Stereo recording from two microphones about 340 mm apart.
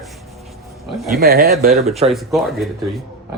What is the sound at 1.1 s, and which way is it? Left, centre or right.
Speech, right.